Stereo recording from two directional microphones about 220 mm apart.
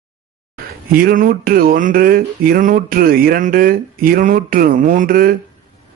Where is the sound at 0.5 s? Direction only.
40° right (ahead or behind).